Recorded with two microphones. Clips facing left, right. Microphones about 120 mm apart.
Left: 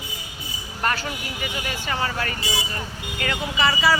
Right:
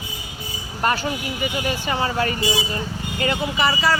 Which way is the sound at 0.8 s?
20° right (ahead or behind).